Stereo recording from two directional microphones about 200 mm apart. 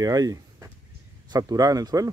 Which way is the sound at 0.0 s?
20° right (ahead or behind).